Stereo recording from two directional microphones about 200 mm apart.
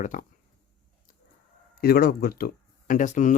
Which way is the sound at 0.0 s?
40° left (ahead or behind).